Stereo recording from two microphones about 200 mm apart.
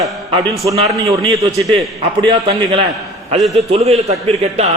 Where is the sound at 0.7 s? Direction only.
15° right (ahead or behind).